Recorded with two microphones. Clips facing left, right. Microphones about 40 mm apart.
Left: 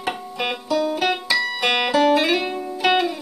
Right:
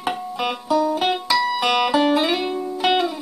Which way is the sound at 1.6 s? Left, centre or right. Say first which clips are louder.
Right 1 dB; left.